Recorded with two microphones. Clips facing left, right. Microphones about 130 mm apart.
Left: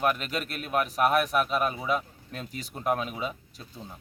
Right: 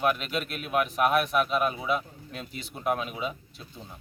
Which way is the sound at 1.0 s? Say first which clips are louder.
Even; 40° left (ahead or behind).